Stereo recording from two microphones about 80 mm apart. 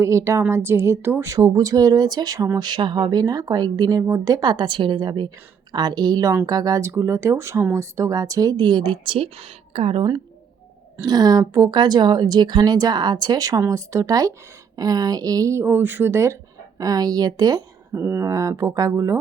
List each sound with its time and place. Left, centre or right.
0.0 s a woman's voice: right
1.3 s a woman's voice: right
2.6 s speech: right
4.0 s a woman's voice: right
8.6 s speech: right
11.0 s a woman's voice: right
11.7 s speech: right
13.6 s a woman's voice: right
15.6 s a woman's voice: right
17.9 s speech: right